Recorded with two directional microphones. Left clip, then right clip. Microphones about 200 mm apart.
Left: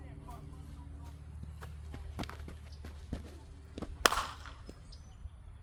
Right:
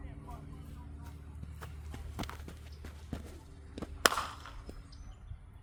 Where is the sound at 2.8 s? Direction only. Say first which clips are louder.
Right 1 dB; 15° right (ahead or behind).